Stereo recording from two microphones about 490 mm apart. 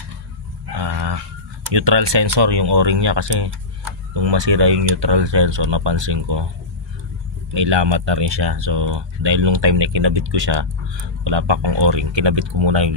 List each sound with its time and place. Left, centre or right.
0.7 s a sound: right
1.7 s speech: right
7.5 s speech: right